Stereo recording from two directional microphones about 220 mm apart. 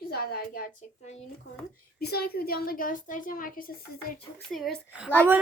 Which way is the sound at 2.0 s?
45° left (ahead or behind).